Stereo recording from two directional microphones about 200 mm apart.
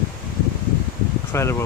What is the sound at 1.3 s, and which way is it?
Speech, 15° left (ahead or behind).